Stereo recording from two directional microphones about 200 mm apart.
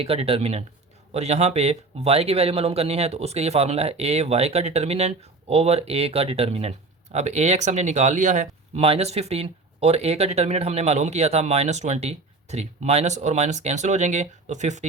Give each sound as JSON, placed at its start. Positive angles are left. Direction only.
{"t": 0.0, "sound": "speech", "side_deg": -30}